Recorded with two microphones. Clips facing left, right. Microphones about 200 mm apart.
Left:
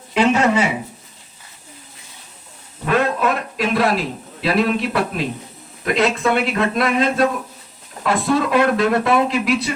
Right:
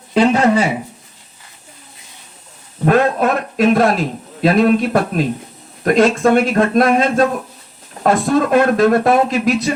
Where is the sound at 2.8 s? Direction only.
45° right (ahead or behind).